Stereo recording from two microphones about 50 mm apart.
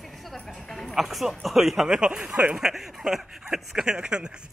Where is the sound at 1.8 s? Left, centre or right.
Centre.